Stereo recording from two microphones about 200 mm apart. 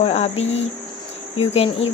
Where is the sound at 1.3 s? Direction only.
30° left (ahead or behind).